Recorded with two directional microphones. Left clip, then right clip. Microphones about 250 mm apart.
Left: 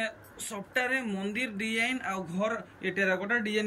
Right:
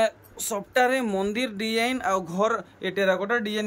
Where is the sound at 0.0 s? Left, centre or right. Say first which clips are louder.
Right 10 dB; centre.